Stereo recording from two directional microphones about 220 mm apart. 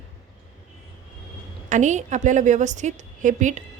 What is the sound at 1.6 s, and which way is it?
A woman's voice, 35° right (ahead or behind).